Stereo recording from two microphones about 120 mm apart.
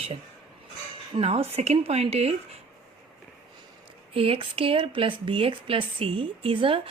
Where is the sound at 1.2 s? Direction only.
60° right (ahead or behind).